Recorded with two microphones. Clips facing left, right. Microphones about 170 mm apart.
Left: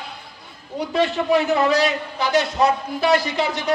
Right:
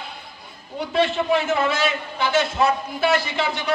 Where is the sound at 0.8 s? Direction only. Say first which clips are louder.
Even; 40° left (ahead or behind).